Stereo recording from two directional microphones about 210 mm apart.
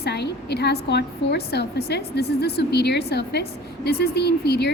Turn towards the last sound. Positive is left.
turn(degrees=50)  # may be behind; listen again after turning